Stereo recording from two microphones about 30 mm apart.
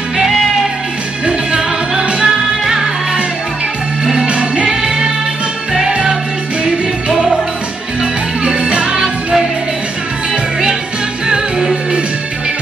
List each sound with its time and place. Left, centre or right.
1.2 s music: right
2.2 s music: centre
4.0 s music: right
4.3 s music: right
4.6 s music: right
11.2 s music: right